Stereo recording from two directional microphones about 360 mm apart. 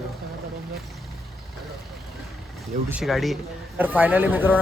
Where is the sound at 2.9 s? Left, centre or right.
Centre.